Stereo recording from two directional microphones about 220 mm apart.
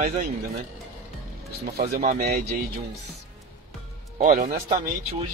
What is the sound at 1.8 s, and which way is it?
Speech, 35° right (ahead or behind).